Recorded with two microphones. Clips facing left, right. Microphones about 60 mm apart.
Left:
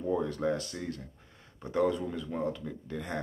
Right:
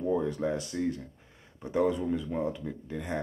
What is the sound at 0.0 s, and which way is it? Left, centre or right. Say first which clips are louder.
Speech: right 1 dB; centre.